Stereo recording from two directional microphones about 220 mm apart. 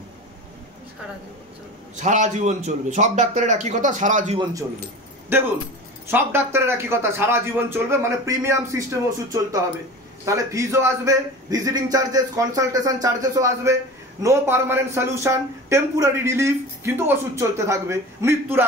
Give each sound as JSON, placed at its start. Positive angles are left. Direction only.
{"t": 2.0, "sound": "a man's voice", "side_deg": -35}
{"t": 5.3, "sound": "a man's voice", "side_deg": -10}